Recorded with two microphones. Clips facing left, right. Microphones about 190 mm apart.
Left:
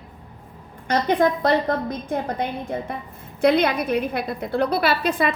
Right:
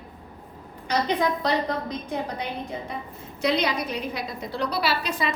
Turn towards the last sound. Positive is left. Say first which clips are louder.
# left 5 dB
turn(degrees=55)  # may be behind; listen again after turning